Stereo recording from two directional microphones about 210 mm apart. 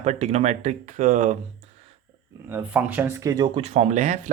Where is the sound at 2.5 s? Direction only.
10° right (ahead or behind); by 4.3 s 35° right (ahead or behind).